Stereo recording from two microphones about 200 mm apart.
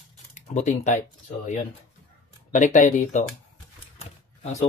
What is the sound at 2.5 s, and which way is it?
Speech, 35° left (ahead or behind).